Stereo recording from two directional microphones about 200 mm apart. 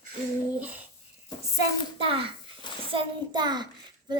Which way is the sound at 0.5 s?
5° right (ahead or behind).